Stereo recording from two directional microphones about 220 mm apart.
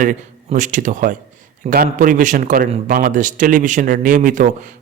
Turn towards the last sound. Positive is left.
turn(degrees=-35)  # may be behind; listen again after turning